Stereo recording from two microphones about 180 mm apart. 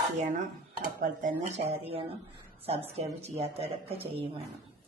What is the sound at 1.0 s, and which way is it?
Speech, 45° right (ahead or behind).